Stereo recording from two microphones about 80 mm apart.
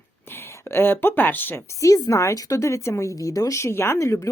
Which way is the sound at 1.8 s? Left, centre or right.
Left.